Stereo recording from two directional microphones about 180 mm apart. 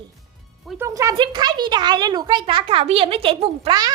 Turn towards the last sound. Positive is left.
turn(degrees=-20)  # may be behind; listen again after turning